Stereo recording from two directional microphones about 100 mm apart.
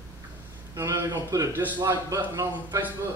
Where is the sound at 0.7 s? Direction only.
35° right (ahead or behind).